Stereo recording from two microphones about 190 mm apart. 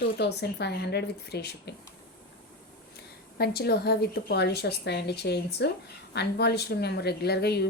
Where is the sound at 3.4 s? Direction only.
55° left (ahead or behind).